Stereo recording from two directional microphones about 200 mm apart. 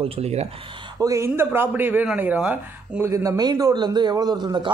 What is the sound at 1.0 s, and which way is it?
Speech, 15° right (ahead or behind).